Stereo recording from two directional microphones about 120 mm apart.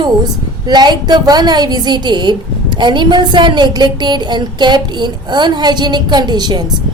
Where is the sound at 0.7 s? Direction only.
35° right (ahead or behind).